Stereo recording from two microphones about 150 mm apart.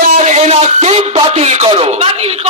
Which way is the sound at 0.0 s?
60° right (ahead or behind).